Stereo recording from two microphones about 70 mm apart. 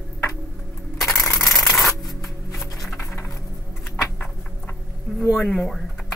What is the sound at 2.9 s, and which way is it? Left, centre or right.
Music, left.